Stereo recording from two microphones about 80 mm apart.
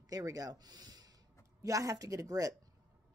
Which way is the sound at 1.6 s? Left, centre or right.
Right.